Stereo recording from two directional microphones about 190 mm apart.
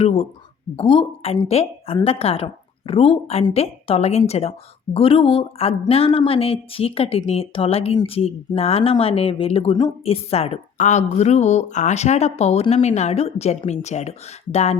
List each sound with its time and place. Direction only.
0.0 s a woman's voice: 30° left (ahead or behind)